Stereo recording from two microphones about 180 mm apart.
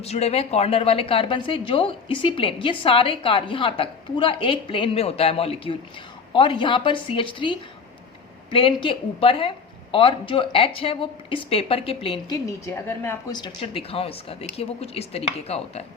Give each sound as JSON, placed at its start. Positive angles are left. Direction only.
{"t": 0.0, "sound": "a woman's voice", "side_deg": 35}
{"t": 12.5, "sound": "a woman's voice", "side_deg": 15}